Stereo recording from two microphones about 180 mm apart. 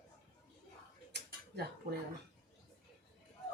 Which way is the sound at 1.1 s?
60° right (ahead or behind).